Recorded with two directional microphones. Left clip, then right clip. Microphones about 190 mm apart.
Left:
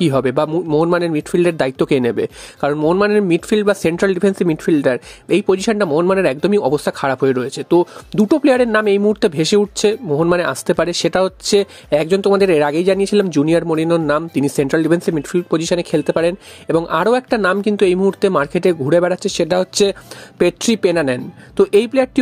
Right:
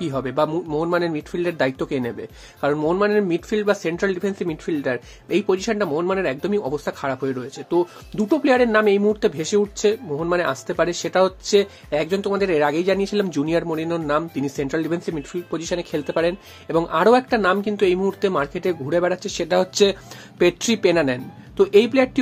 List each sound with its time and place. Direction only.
0.0 s speech: 45° left (ahead or behind)